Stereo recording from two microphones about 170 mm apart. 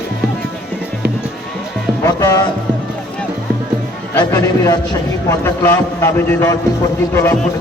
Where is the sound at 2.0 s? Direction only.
20° left (ahead or behind).